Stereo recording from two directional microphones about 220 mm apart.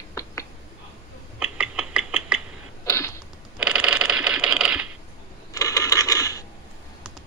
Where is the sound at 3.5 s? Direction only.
5° right (ahead or behind).